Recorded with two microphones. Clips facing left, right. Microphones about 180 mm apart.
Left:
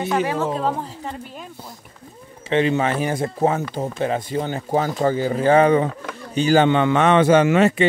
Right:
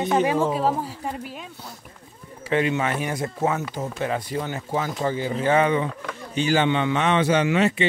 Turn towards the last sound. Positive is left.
turn(degrees=45)  # may be behind; listen again after turning